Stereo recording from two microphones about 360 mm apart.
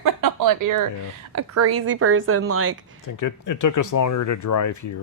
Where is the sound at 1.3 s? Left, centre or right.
Right.